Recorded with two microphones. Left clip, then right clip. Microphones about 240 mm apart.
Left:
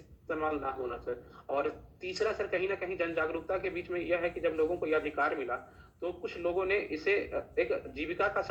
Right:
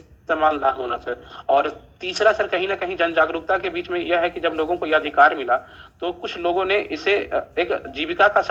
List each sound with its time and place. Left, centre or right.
0.3 s a man's voice: right